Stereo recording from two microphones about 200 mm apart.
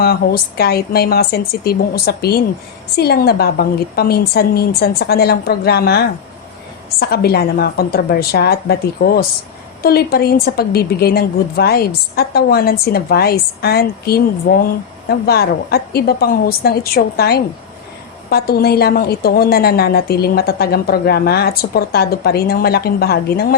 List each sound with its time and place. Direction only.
0.0 s a woman's voice: 50° left (ahead or behind)